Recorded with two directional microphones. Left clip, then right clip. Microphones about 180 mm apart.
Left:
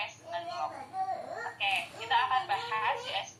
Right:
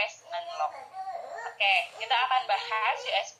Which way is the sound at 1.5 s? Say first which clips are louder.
Right 7 dB; 30° right (ahead or behind).